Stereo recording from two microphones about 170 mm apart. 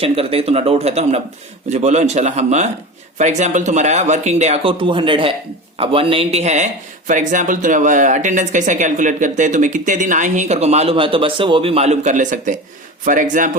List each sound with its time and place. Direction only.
0.0 s speech: 35° right (ahead or behind); by 13.5 s 50° right (ahead or behind)